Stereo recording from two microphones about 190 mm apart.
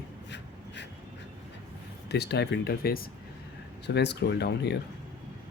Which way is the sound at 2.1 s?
60° left (ahead or behind).